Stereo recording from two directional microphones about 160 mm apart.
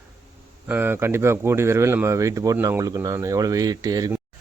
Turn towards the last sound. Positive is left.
turn(degrees=-25)  # may be behind; listen again after turning